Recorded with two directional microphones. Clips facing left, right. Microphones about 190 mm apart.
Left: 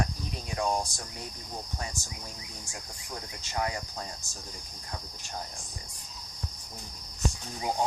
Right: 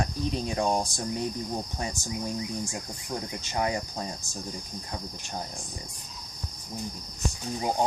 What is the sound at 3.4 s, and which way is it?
Speech, 20° right (ahead or behind).